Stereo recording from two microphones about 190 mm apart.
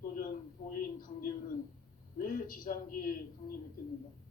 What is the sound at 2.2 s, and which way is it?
Speech, 45° left (ahead or behind).